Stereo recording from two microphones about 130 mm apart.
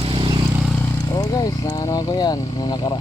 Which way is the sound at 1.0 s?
30° left (ahead or behind).